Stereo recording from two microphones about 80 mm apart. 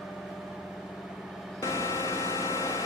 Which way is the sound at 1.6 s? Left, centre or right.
Left.